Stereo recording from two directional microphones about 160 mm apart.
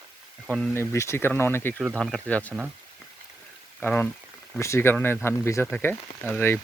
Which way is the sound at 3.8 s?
10° left (ahead or behind).